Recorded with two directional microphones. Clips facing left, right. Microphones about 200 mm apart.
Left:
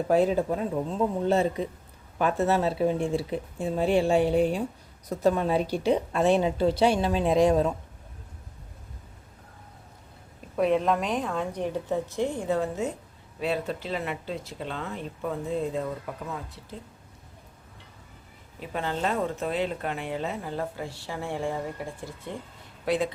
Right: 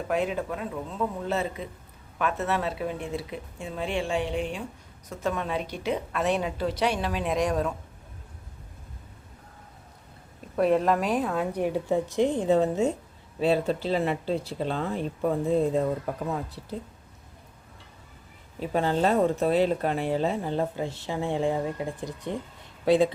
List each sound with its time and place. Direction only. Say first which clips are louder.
0.1 s a woman's voice: left 5 dB; 35° left (ahead or behind)
10.6 s a woman's voice: right 1 dB; centre (ahead or behind); by 16.4 s 40° right (ahead or behind)
18.6 s speech: right 5 dB; 35° right (ahead or behind); by 22.4 s 20° right (ahead or behind)